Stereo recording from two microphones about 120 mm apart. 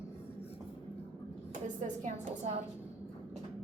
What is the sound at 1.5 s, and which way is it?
A woman's voice, 90° right.